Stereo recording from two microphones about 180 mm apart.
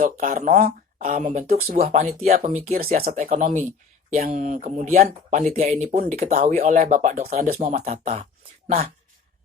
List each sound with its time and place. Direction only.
0.0 s speech: 45° right (ahead or behind)
6.3 s speech: 50° right (ahead or behind)
8.6 s speech: 55° right (ahead or behind)